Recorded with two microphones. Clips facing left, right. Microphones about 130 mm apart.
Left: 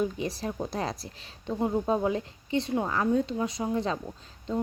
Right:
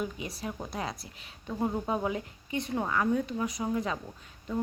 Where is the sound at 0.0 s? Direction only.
35° left (ahead or behind).